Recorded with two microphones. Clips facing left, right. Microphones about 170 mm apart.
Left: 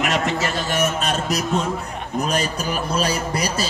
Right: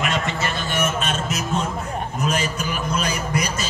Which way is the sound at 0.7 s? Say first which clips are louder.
Left 1 dB; 35° left (ahead or behind).